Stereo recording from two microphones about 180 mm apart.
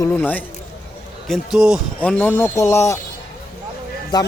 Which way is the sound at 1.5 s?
5° right (ahead or behind).